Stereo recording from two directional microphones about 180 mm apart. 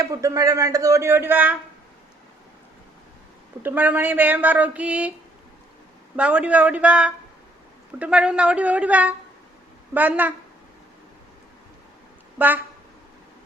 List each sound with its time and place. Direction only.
0.0 s a man's voice: 20° right (ahead or behind)
3.6 s a man's voice: 10° right (ahead or behind)
6.1 s a man's voice: 5° right (ahead or behind)
12.4 s a man's voice: 10° right (ahead or behind)